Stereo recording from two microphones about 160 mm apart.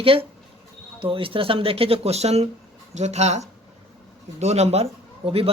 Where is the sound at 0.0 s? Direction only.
35° right (ahead or behind).